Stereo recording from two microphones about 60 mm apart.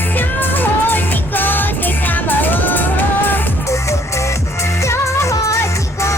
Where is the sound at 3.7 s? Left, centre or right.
Left.